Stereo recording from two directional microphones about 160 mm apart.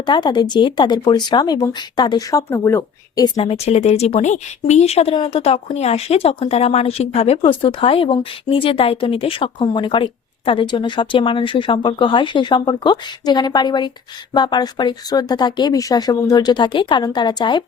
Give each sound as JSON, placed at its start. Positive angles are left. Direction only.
{"t": 0.0, "sound": "speech", "side_deg": 30}
{"t": 3.2, "sound": "a woman's voice", "side_deg": 30}